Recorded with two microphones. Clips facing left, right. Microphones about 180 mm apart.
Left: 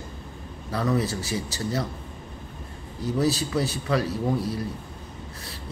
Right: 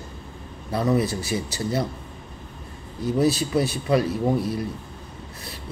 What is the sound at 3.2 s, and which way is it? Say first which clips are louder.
Speech: right 3 dB; 15° right (ahead or behind).